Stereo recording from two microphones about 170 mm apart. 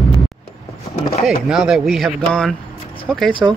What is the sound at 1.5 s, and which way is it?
Speech, 5° right (ahead or behind).